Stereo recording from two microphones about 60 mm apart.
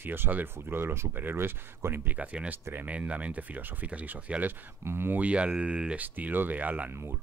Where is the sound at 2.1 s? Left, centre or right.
Right.